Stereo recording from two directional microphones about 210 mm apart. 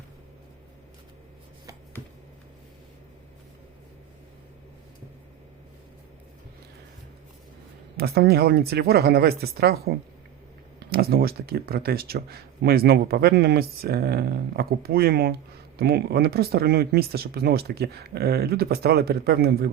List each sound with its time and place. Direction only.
7.9 s speech: 50° right (ahead or behind)